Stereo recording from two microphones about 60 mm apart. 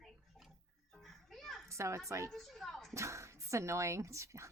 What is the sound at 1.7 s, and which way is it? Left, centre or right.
Speech, right.